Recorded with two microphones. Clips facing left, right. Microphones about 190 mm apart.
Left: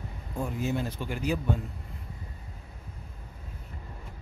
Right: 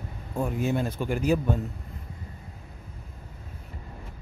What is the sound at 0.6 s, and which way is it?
Speech, 50° right (ahead or behind).